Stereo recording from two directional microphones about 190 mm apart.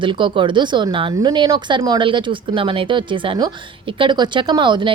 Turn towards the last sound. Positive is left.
turn(degrees=-25)  # may be behind; listen again after turning